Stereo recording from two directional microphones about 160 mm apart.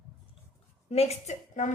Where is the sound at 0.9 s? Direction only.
40° left (ahead or behind).